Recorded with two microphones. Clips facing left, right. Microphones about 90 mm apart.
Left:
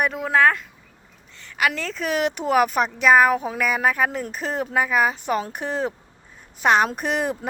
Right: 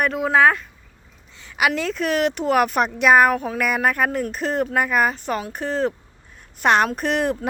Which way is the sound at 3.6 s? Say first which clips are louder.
Right 1 dB; centre (ahead or behind).